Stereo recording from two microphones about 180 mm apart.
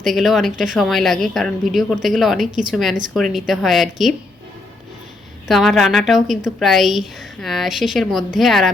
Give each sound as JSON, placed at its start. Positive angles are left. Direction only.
{"t": 0.0, "sound": "a woman's voice", "side_deg": 0}
{"t": 5.5, "sound": "a woman's voice", "side_deg": 0}